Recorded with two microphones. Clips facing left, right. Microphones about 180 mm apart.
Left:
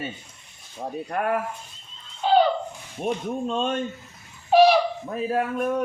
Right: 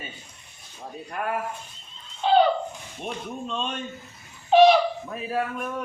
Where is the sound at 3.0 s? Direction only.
45° left (ahead or behind).